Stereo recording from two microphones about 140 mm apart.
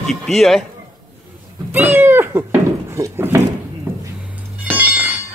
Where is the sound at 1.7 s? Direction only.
15° right (ahead or behind).